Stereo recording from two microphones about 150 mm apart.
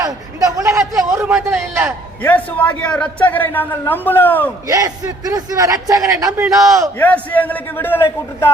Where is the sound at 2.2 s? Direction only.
10° left (ahead or behind).